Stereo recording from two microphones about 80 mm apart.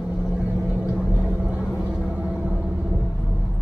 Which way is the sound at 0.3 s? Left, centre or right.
Centre.